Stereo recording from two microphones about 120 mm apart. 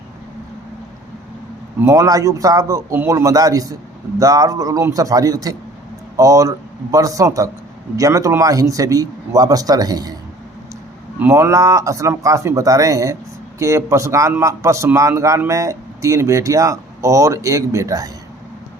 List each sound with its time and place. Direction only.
1.8 s a man's voice: 25° right (ahead or behind)
11.2 s a man's voice: 20° right (ahead or behind)